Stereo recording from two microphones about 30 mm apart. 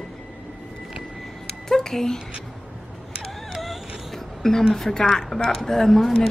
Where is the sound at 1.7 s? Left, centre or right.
Centre.